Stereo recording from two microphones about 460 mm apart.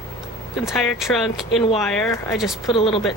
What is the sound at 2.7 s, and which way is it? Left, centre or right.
Speech, centre.